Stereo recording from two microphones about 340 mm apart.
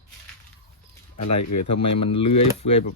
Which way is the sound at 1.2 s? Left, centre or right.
Left.